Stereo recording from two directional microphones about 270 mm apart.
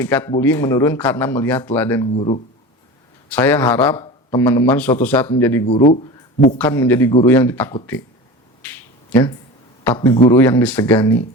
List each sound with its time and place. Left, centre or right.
0.0 s speech: centre
2.0 s speech: left
3.2 s speech: centre
5.6 s speech: left
6.6 s speech: centre
9.8 s speech: centre